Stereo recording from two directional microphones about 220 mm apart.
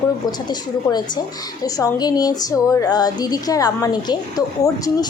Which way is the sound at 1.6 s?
15° left (ahead or behind).